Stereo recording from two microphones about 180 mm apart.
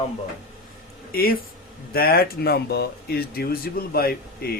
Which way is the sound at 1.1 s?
55° left (ahead or behind).